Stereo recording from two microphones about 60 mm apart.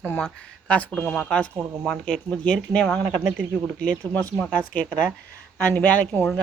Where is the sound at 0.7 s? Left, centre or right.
Left.